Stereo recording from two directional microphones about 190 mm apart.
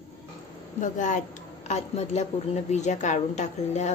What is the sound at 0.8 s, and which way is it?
A woman's voice, 40° left (ahead or behind).